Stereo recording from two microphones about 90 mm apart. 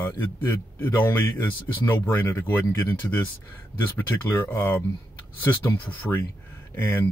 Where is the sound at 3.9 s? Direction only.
25° left (ahead or behind).